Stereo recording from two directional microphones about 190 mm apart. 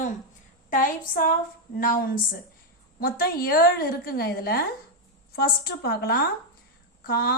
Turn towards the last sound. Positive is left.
turn(degrees=50)  # may be behind; listen again after turning